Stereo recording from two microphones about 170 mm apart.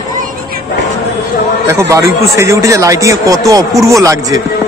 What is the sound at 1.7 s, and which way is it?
A man's voice, 15° right (ahead or behind).